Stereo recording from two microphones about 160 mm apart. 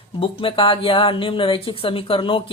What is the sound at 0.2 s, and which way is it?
Speech, 35° left (ahead or behind).